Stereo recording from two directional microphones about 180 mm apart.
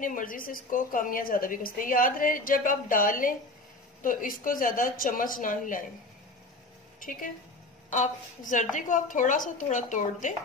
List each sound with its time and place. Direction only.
0.0 s a woman's voice: 50° left (ahead or behind)
7.9 s a woman's voice: 45° left (ahead or behind)